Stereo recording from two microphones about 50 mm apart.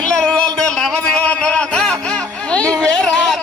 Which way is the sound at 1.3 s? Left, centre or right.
Left.